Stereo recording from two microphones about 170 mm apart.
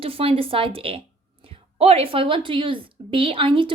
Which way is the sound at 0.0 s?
35° right (ahead or behind).